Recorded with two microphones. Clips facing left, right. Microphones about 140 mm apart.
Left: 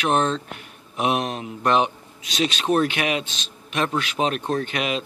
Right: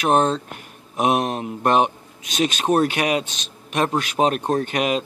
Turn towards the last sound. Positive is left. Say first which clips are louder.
# right 4 dB
turn(degrees=-45)  # may be behind; listen again after turning